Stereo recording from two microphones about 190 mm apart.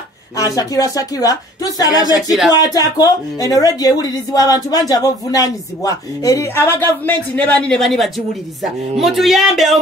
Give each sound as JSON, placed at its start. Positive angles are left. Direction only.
{"t": 0.4, "sound": "speech", "side_deg": 20}